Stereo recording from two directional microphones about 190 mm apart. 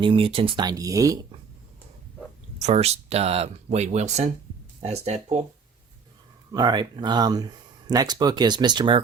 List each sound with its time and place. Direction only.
0.0 s speech: 30° right (ahead or behind)
2.6 s speech: 35° right (ahead or behind)
6.5 s speech: 20° right (ahead or behind)